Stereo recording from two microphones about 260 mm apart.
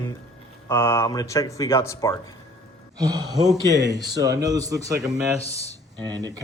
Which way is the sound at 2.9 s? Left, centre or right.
Centre.